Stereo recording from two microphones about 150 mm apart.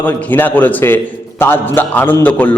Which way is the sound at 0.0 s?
10° left (ahead or behind).